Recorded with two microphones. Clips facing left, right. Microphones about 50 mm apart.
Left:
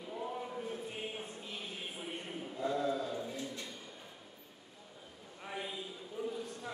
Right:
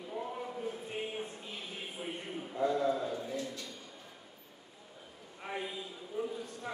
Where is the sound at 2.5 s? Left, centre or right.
Right.